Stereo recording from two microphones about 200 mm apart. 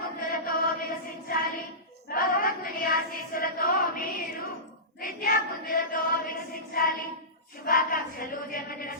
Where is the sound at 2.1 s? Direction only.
45° left (ahead or behind).